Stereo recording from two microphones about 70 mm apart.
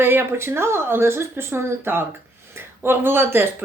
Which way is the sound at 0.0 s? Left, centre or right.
Right.